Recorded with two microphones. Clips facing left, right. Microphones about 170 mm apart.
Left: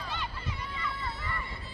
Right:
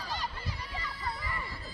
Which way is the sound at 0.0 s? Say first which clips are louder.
Even; 35° right (ahead or behind).